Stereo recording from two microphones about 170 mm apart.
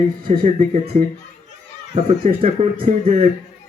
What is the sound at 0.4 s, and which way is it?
A man's voice, 40° right (ahead or behind).